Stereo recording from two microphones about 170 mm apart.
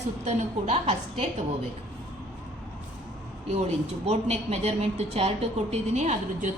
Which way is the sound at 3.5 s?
40° right (ahead or behind).